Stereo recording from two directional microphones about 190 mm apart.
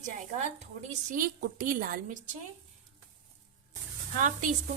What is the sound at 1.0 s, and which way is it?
A woman's voice, 45° right (ahead or behind).